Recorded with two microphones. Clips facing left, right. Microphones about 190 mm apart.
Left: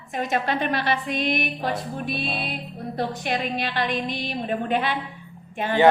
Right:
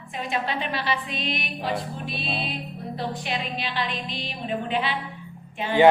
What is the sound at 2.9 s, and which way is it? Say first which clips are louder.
A woman's voice: left 4 dB; 50° left (ahead or behind).